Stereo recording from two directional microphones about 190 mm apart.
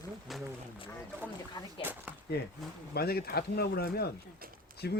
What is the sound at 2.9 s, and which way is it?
Speech, 55° left (ahead or behind).